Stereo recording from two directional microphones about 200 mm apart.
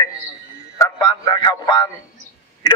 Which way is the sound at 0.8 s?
20° left (ahead or behind).